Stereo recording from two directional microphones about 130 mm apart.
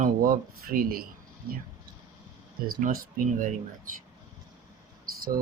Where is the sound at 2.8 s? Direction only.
90° right.